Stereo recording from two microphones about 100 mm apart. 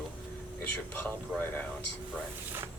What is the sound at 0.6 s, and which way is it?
Speech, 20° left (ahead or behind).